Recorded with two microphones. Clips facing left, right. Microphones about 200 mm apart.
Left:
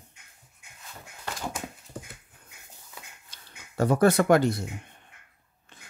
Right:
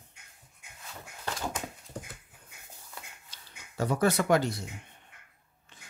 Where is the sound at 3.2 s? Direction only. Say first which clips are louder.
Left 1 dB; 55° left (ahead or behind).